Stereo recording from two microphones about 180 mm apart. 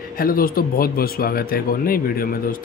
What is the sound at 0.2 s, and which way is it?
Speech, 55° left (ahead or behind).